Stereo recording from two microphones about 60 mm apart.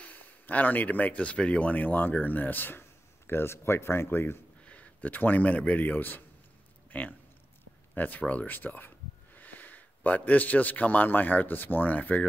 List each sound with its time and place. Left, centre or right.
0.0 s speech: left
4.6 s a man's voice: left